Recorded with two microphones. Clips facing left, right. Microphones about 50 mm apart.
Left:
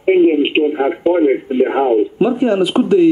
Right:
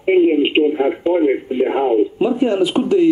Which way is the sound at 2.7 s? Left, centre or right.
Left.